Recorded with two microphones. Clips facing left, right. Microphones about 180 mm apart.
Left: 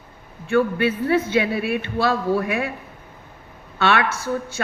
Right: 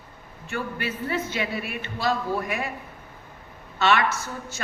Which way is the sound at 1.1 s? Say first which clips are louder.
Left 7 dB; 60° left (ahead or behind).